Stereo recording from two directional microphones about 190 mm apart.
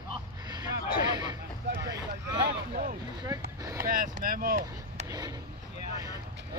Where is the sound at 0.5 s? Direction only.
20° right (ahead or behind).